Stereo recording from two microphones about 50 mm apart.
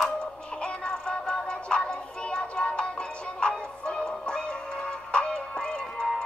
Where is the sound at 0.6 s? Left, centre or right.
Centre.